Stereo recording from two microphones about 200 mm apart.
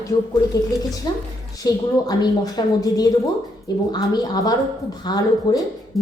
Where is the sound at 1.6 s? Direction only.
20° left (ahead or behind).